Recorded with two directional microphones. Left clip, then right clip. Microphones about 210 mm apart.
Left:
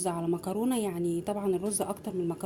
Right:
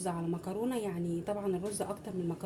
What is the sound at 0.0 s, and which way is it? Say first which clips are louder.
A woman's voice: left 6 dB; 40° left (ahead or behind).